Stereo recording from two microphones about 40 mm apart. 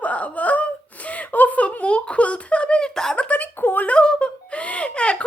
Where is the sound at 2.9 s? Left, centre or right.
Centre.